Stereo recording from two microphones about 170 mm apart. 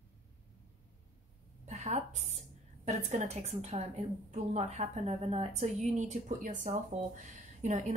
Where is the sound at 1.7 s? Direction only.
45° right (ahead or behind).